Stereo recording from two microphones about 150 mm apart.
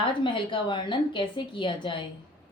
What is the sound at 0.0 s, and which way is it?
A woman's voice, 35° left (ahead or behind).